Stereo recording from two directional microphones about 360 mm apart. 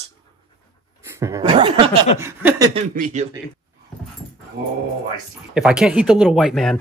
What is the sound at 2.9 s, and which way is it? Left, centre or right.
Speech, right.